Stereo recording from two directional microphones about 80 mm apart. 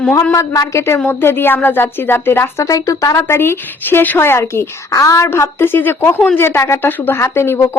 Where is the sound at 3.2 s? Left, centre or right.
Left.